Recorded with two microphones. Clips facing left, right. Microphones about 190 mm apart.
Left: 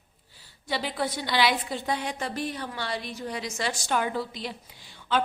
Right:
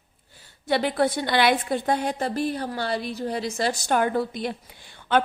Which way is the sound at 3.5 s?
45° right (ahead or behind).